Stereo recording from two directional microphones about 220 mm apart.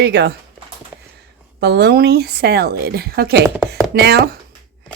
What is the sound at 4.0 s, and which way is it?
Speech, 50° right (ahead or behind).